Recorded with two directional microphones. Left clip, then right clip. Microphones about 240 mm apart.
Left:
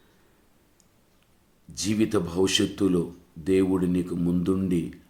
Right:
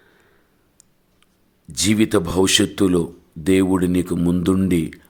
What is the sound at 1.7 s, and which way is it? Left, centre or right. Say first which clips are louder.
Speech: right 7 dB; right.